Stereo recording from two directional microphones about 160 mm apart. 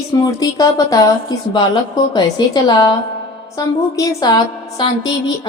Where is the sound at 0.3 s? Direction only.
20° left (ahead or behind).